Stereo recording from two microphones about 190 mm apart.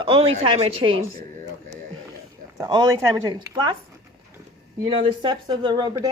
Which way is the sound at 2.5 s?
20° right (ahead or behind).